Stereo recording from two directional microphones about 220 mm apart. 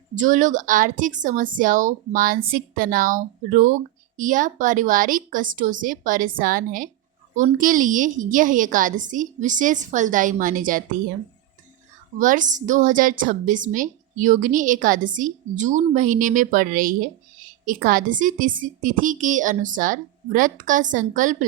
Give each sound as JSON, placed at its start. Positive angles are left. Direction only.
{"t": 0.2, "sound": "a woman's voice", "side_deg": -35}
{"t": 12.2, "sound": "a woman's voice", "side_deg": -35}